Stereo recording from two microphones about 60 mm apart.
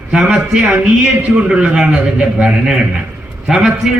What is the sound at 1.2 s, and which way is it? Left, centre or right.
A man's voice, centre.